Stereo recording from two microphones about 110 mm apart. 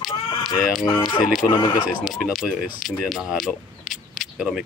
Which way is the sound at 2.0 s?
Centre (ahead or behind).